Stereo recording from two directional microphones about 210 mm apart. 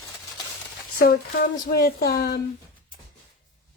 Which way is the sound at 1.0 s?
45° left (ahead or behind).